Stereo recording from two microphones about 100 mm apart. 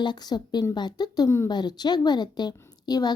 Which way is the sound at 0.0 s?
45° left (ahead or behind).